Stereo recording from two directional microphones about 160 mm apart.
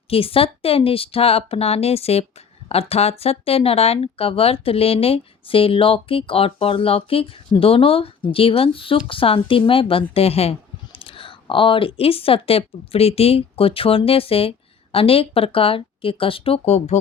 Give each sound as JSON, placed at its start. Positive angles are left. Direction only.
{"t": 0.1, "sound": "speech", "side_deg": 35}